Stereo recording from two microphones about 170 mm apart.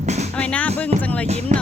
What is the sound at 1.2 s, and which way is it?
Music, 40° right (ahead or behind).